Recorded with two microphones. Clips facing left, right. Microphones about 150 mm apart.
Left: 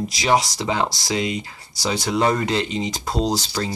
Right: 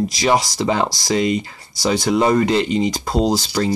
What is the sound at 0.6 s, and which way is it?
Speech, 55° right (ahead or behind).